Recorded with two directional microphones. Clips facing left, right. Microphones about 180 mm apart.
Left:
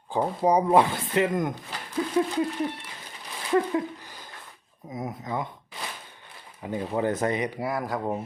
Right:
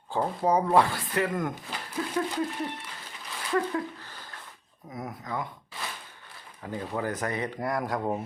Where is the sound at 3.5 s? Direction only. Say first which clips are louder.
Left 4 dB; 20° left (ahead or behind).